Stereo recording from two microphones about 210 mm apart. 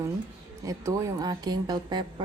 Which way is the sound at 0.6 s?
15° right (ahead or behind).